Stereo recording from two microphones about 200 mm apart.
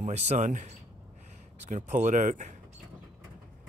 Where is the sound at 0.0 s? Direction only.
35° right (ahead or behind).